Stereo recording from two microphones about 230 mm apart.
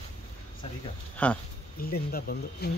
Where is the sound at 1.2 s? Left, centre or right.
Centre.